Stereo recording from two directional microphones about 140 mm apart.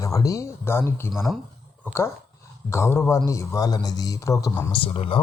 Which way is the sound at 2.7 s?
15° left (ahead or behind).